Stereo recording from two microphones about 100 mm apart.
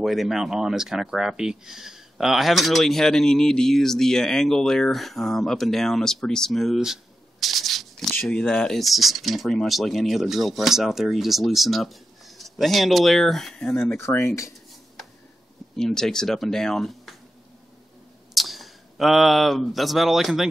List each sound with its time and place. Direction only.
0.0 s speech: centre (ahead or behind)
13.9 s speech: 25° left (ahead or behind)
15.7 s speech: 5° left (ahead or behind)
18.3 s speech: centre (ahead or behind)